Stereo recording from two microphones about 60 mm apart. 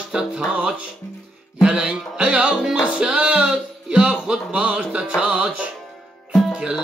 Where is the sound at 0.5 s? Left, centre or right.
Right.